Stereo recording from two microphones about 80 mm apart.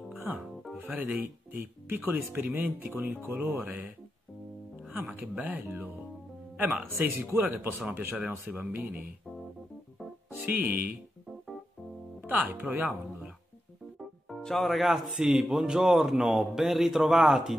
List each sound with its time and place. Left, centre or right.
0.9 s speech: right
4.9 s speech: right
10.5 s speech: right
12.2 s speech: right
14.4 s speech: centre